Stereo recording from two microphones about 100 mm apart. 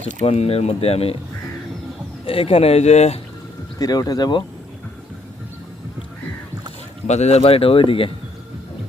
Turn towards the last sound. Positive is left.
turn(degrees=70)  # may be behind; listen again after turning